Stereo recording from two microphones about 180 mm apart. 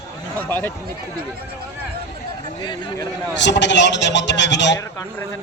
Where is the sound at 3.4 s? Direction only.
80° left.